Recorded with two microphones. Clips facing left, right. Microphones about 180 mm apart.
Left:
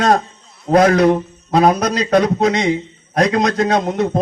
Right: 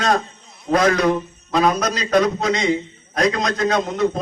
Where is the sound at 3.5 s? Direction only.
35° left (ahead or behind).